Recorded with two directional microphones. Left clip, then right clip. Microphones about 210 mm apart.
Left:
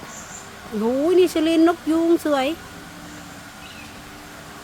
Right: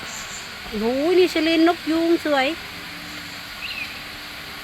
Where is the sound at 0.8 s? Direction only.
10° left (ahead or behind).